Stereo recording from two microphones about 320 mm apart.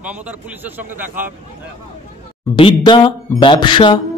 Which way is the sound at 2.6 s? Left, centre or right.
Centre.